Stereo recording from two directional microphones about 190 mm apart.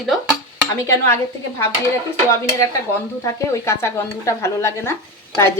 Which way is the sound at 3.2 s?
15° left (ahead or behind).